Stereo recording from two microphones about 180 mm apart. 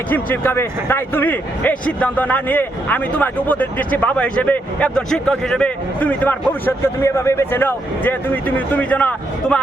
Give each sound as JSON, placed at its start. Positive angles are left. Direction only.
{"t": 0.1, "sound": "speech", "side_deg": 10}